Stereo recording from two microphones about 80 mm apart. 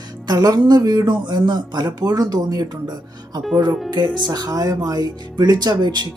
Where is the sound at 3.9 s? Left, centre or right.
Right.